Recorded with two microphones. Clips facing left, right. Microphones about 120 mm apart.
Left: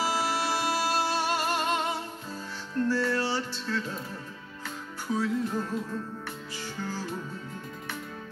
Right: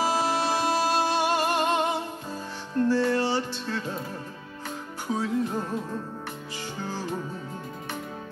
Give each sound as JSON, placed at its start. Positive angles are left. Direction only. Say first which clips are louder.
{"t": 0.0, "sound": "music", "louder": "right 4 dB", "side_deg": -20}
{"t": 3.7, "sound": "speech", "louder": "even", "side_deg": -20}
{"t": 4.6, "sound": "music", "louder": "right 2 dB", "side_deg": -20}